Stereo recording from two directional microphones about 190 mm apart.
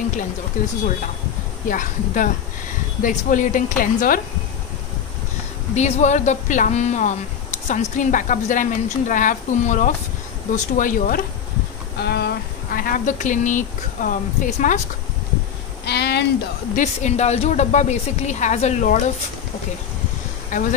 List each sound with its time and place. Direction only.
0.6 s speech: 45° left (ahead or behind)
5.8 s a woman's voice: 35° left (ahead or behind)
12.0 s speech: 60° left (ahead or behind); by 14.8 s 40° left (ahead or behind)
15.8 s a sound: 60° left (ahead or behind)
16.7 s a woman's voice: 40° left (ahead or behind)
20.5 s a woman's voice: 40° left (ahead or behind)